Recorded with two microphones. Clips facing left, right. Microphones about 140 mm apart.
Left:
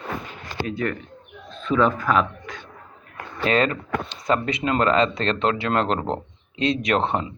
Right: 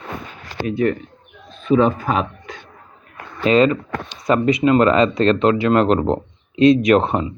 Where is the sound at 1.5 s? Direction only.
20° right (ahead or behind).